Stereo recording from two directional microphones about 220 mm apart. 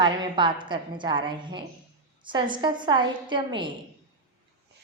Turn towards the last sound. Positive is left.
turn(degrees=-20)  # may be behind; listen again after turning